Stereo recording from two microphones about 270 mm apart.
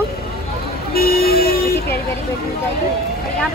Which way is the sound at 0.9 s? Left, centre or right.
Left.